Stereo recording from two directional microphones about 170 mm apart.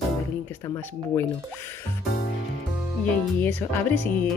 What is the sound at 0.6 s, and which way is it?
Speech, 15° left (ahead or behind).